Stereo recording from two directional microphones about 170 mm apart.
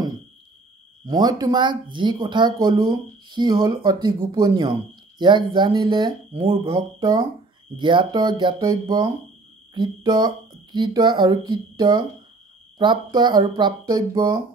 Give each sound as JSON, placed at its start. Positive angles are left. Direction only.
{"t": 1.0, "sound": "speech", "side_deg": -25}
{"t": 6.7, "sound": "speech", "side_deg": -20}